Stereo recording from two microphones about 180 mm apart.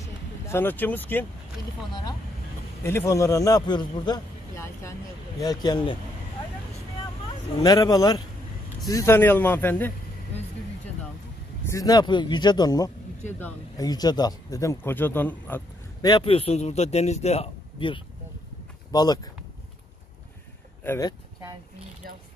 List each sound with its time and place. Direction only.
0.0 s vehicle: 15° left (ahead or behind)
2.8 s a man's voice: 15° left (ahead or behind)
7.6 s speech: 20° left (ahead or behind)
11.6 s speech: 20° left (ahead or behind)
16.0 s a man's voice: 25° left (ahead or behind)
20.8 s speech: 15° left (ahead or behind)